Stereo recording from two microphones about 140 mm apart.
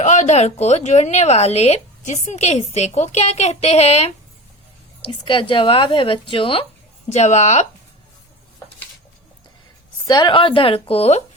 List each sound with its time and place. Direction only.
0.0 s speech: 60° left (ahead or behind)
5.2 s speech: 35° left (ahead or behind)
7.1 s speech: 55° left (ahead or behind)
10.1 s speech: 35° left (ahead or behind)